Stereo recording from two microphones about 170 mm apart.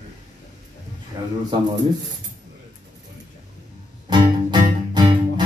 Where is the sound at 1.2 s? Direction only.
25° right (ahead or behind).